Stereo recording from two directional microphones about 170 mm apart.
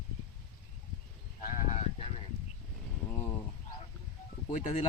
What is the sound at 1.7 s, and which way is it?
Sheep, 40° left (ahead or behind).